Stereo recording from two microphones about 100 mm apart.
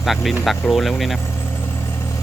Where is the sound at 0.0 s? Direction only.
Centre (ahead or behind).